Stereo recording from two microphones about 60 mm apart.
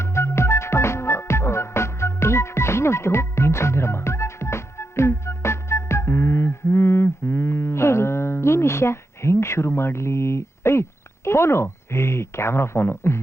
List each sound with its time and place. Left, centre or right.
0.0 s music: left
11.3 s speech: left